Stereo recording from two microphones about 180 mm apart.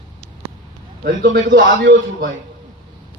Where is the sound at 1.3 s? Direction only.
50° right (ahead or behind).